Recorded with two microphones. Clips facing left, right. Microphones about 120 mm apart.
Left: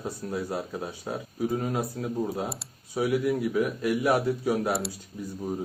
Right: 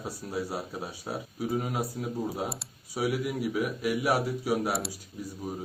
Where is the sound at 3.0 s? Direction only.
10° right (ahead or behind).